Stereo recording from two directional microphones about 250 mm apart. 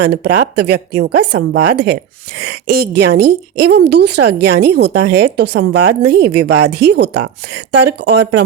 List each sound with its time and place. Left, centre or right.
0.0 s a woman's voice: right